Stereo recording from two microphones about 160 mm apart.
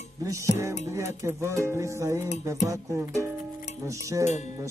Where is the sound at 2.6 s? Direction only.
20° right (ahead or behind).